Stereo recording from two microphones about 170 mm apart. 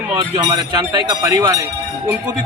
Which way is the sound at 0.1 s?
25° right (ahead or behind).